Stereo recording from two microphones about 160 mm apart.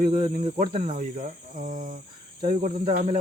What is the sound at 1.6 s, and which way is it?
Cricket, 55° right (ahead or behind).